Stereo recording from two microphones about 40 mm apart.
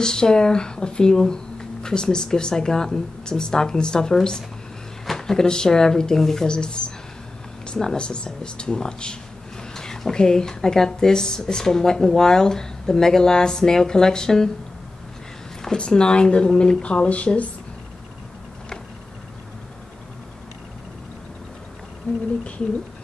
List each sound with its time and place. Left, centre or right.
0.0 s a woman's voice: centre
15.8 s speech: left